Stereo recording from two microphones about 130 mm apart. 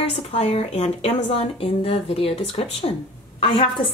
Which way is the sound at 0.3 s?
50° left (ahead or behind).